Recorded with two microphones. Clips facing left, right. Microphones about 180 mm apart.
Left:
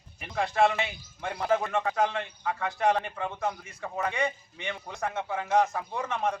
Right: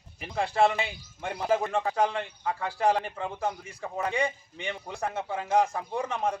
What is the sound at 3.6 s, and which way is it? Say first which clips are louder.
Speech: right 1 dB; 30° right (ahead or behind).